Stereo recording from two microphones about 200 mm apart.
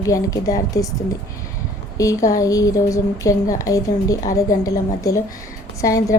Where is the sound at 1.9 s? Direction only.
15° left (ahead or behind).